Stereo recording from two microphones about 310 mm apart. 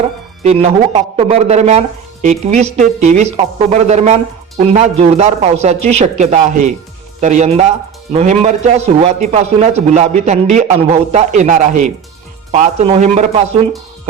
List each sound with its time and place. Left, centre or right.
0.4 s a man's voice: centre